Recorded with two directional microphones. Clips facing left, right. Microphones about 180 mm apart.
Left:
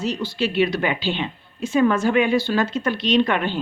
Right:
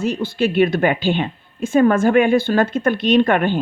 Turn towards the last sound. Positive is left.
turn(degrees=-50)  # may be behind; listen again after turning